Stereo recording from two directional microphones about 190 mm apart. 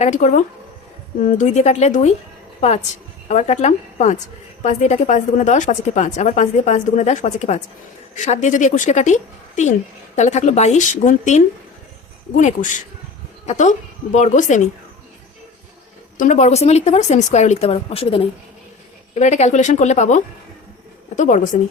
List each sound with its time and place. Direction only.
0.0 s a woman's voice: 40° left (ahead or behind)
16.1 s a woman's voice: 40° left (ahead or behind)